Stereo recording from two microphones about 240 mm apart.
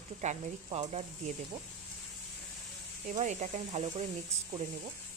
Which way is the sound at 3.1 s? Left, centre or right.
Right.